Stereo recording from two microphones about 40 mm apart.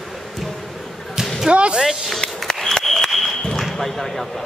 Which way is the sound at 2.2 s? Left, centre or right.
Left.